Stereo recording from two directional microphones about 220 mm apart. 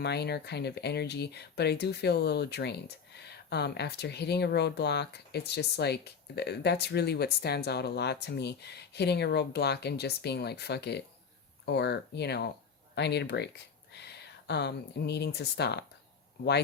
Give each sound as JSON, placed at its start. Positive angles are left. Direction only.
{"t": 0.0, "sound": "speech", "side_deg": 50}